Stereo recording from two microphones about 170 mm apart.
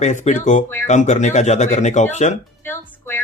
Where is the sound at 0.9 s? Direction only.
45° left (ahead or behind).